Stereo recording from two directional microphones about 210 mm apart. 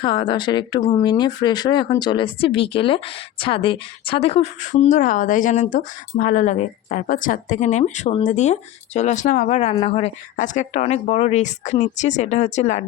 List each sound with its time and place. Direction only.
0.0 s a woman's voice: 20° left (ahead or behind)